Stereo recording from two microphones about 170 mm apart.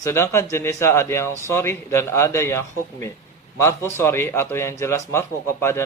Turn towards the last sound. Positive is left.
turn(degrees=15)  # may be behind; listen again after turning